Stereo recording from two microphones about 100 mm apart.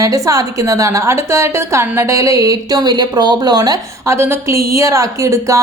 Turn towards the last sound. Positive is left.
turn(degrees=-30)  # may be behind; listen again after turning